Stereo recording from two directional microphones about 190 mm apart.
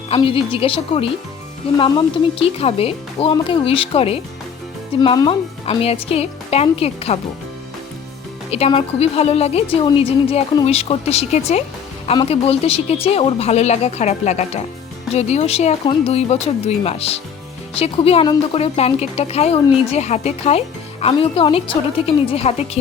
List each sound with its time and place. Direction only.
0.1 s a woman's voice: 30° left (ahead or behind)
8.4 s a woman's voice: 30° left (ahead or behind)